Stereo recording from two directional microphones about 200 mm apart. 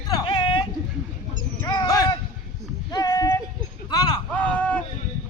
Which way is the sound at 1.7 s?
20° left (ahead or behind).